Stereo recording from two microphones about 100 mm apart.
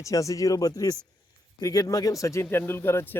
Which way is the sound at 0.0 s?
35° left (ahead or behind).